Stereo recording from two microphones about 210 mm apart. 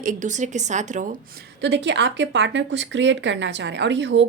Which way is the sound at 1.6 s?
55° right (ahead or behind).